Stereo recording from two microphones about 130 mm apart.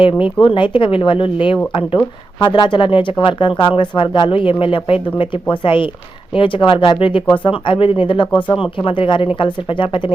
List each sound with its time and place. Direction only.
0.0 s speech: 40° left (ahead or behind)